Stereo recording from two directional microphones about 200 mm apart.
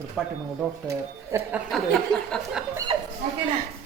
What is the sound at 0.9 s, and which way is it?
Speech, 15° right (ahead or behind).